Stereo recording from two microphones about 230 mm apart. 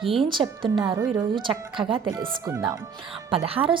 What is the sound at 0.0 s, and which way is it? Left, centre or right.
Speech, centre.